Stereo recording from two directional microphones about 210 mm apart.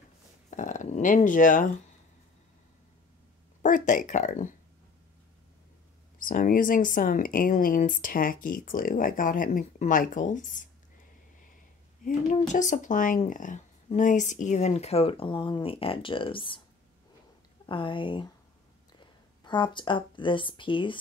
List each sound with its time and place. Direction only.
0.5 s speech: 35° left (ahead or behind)
3.6 s speech: 40° left (ahead or behind)
6.1 s speech: 40° left (ahead or behind)
12.0 s speech: 35° left (ahead or behind)
17.6 s speech: 25° left (ahead or behind)